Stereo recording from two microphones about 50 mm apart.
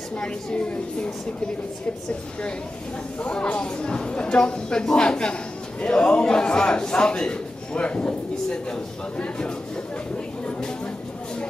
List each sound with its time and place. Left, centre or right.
0.2 s a woman's voice: left
3.2 s speech: left